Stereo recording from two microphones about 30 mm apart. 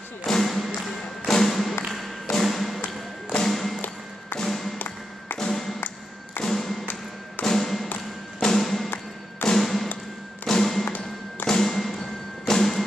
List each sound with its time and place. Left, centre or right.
0.3 s thump: centre
4.4 s music: centre
4.7 s music: left
5.5 s music: centre
6.4 s thump: centre
8.5 s music: centre
9.5 s thump: centre
10.4 s music: centre